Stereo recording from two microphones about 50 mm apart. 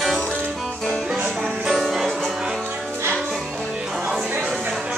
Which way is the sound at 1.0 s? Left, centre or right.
Centre.